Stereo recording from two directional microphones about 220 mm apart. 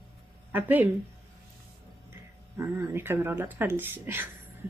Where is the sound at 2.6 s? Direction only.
10° right (ahead or behind).